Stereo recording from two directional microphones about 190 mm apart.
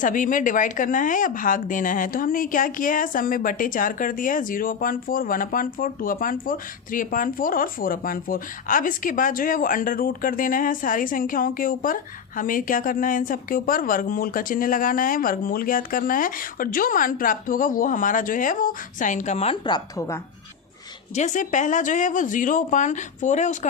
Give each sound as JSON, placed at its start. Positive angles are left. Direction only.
{"t": 0.0, "sound": "speech", "side_deg": 45}
{"t": 21.2, "sound": "speech", "side_deg": 40}